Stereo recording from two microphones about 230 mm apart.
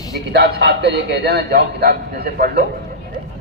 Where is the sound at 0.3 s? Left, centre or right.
Right.